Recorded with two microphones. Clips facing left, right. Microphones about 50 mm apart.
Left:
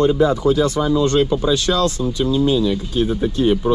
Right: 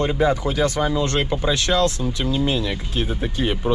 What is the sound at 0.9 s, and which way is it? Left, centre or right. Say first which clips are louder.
Speech: left 6 dB; right.